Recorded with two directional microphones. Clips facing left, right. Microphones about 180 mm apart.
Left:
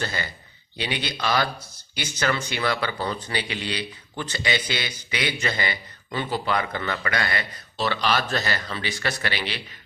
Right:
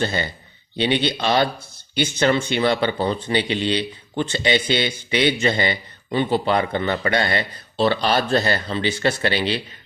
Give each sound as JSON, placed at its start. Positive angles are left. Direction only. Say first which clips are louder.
{"t": 0.0, "sound": "speech", "louder": "right 7 dB", "side_deg": -25}